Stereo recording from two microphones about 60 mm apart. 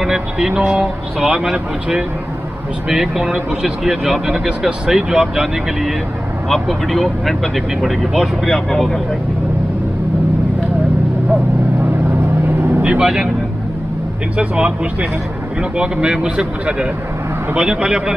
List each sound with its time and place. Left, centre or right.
0.0 s speech: centre
12.8 s speech: centre
14.3 s speech: centre